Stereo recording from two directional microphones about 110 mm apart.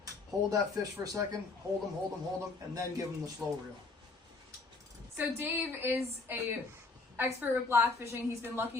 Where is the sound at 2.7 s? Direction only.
30° right (ahead or behind).